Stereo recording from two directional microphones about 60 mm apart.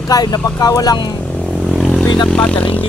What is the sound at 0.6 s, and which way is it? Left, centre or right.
Speech, left.